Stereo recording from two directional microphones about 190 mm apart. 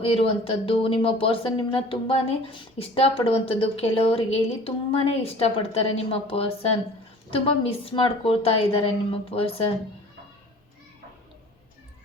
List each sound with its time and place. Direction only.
0.0 s speech: 30° left (ahead or behind)